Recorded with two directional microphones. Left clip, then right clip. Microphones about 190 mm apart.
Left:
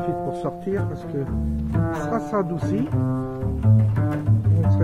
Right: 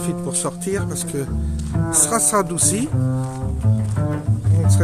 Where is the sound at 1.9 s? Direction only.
20° right (ahead or behind).